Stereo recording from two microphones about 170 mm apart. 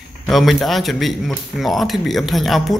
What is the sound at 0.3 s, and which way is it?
A man's voice, centre (ahead or behind).